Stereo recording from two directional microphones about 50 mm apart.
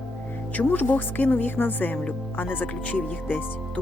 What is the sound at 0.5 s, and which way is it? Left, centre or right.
Speech, left.